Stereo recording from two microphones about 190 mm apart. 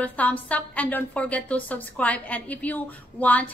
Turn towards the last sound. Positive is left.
turn(degrees=10)  # may be behind; listen again after turning